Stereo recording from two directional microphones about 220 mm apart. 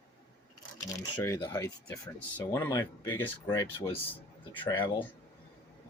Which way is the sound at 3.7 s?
25° left (ahead or behind).